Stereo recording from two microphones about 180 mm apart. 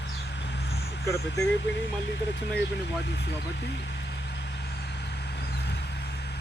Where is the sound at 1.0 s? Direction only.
15° left (ahead or behind).